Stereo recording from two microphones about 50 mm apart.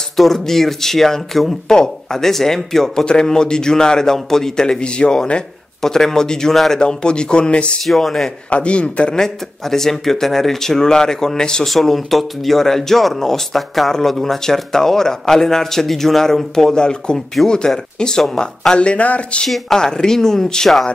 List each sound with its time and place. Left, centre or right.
0.2 s speech: centre
6.5 s speech: centre
6.8 s speech: centre
7.8 s speech: centre
8.5 s speech: left
9.2 s speech: centre
11.6 s speech: centre; by 19.4 s left
19.4 s speech: centre